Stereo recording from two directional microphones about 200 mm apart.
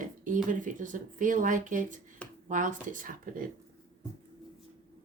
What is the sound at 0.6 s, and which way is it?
Speech, 40° right (ahead or behind).